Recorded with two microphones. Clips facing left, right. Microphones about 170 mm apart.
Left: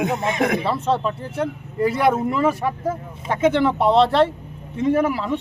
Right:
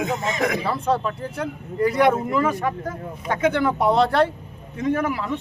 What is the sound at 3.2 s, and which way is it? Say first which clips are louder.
Speech: left 3 dB; 25° left (ahead or behind).